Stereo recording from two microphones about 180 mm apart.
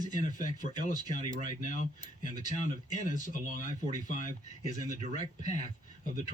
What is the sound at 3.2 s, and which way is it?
Speech, 45° left (ahead or behind).